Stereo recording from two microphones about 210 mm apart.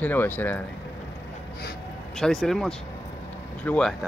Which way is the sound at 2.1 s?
5° left (ahead or behind).